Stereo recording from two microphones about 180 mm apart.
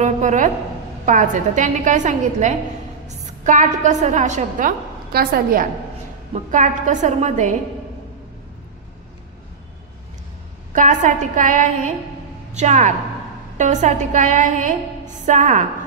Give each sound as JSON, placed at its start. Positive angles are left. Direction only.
{"t": 0.0, "sound": "a sound", "side_deg": -40}
{"t": 1.0, "sound": "a woman's voice", "side_deg": -45}
{"t": 6.5, "sound": "a woman's voice", "side_deg": -45}
{"t": 10.7, "sound": "a woman's voice", "side_deg": -45}